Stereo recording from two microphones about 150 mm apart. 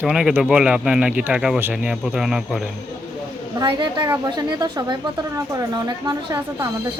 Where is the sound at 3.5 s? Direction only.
30° right (ahead or behind).